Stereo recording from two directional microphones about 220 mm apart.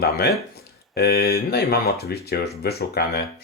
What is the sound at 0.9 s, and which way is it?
Speech, 45° left (ahead or behind).